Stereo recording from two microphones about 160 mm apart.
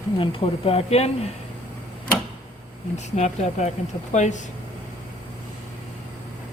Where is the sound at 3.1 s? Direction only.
45° left (ahead or behind).